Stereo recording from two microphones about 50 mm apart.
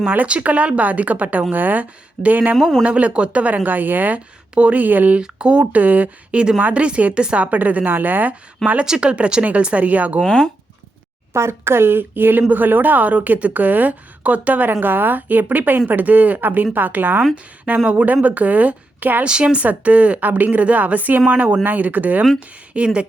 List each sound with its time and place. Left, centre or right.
0.0 s a woman's voice: right
2.6 s speech: centre
2.8 s a woman's voice: right
5.2 s speech: right
6.3 s speech: centre
7.4 s a woman's voice: right
10.2 s speech: centre
11.3 s a woman's voice: right
19.2 s speech: centre
19.6 s a woman's voice: right
22.7 s speech: right